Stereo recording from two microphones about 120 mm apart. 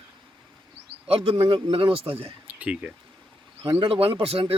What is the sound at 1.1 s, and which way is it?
A man's voice, 55° right (ahead or behind).